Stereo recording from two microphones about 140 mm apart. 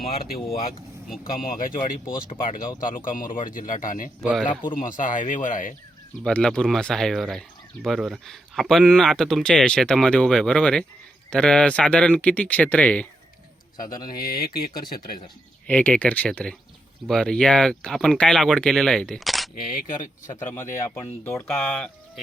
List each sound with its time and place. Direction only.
0.0 s speech: 90° left
4.7 s speech: 70° left (ahead or behind)
6.2 s speech: 5° left (ahead or behind)
14.1 s speech: 90° left
15.6 s speech: 10° left (ahead or behind)
19.6 s speech: 75° left (ahead or behind)
20.3 s speech: 20° left (ahead or behind)
21.5 s speech: 5° left (ahead or behind)